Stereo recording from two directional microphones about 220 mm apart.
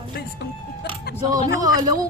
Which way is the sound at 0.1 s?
45° left (ahead or behind).